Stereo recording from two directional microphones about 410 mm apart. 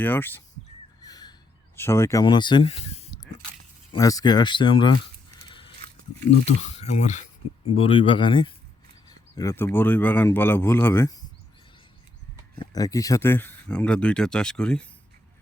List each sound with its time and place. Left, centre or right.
0.0 s speech: centre
1.0 s a sound: centre
3.9 s speech: centre
5.5 s a sound: centre
6.7 s speech: centre
12.5 s speech: centre